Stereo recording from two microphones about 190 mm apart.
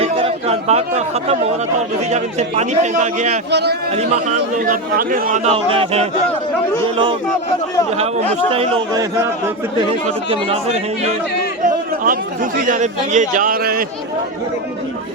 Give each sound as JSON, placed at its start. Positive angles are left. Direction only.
{"t": 0.0, "sound": "chatter", "side_deg": -30}
{"t": 2.0, "sound": "a man's voice", "side_deg": -35}
{"t": 3.5, "sound": "a man's voice", "side_deg": -60}
{"t": 3.9, "sound": "speech", "side_deg": -35}
{"t": 5.5, "sound": "a man's voice", "side_deg": -30}
{"t": 8.4, "sound": "a man's voice", "side_deg": -30}
{"t": 8.9, "sound": "a man's voice", "side_deg": -20}
{"t": 10.2, "sound": "a man's voice", "side_deg": -35}
{"t": 11.6, "sound": "speech", "side_deg": -45}